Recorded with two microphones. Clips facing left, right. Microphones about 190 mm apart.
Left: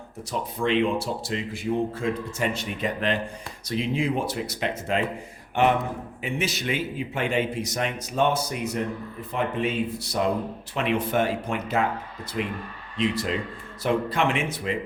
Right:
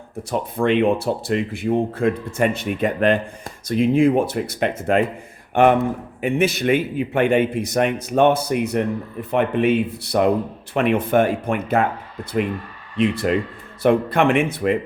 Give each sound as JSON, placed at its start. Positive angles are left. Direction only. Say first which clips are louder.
{"t": 0.3, "sound": "speech", "louder": "right 6 dB", "side_deg": -55}
{"t": 13.0, "sound": "speech", "louder": "right 7 dB", "side_deg": -60}